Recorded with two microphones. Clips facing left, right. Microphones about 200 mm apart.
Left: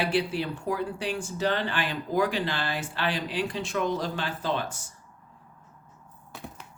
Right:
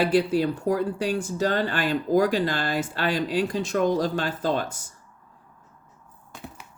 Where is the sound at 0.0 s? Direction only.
45° right (ahead or behind).